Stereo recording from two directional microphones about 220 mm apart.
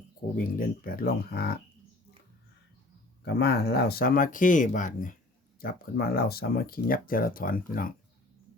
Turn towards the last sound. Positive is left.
turn(degrees=40)  # may be behind; listen again after turning